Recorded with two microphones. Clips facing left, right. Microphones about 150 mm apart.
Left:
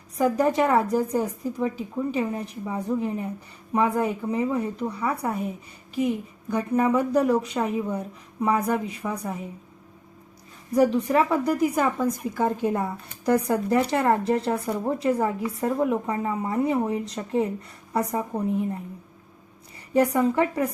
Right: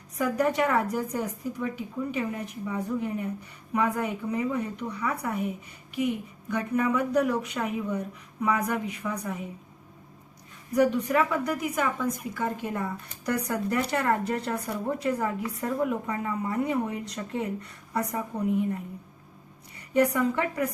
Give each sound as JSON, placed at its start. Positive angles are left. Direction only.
{"t": 0.2, "sound": "speech", "side_deg": 30}
{"t": 6.5, "sound": "speech", "side_deg": 30}
{"t": 11.1, "sound": "speech", "side_deg": 35}
{"t": 19.9, "sound": "speech", "side_deg": 30}